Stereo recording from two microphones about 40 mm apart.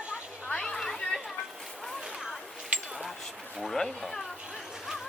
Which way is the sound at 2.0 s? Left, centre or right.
Centre.